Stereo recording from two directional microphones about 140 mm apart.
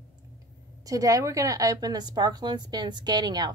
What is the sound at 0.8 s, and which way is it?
Speech, 25° right (ahead or behind).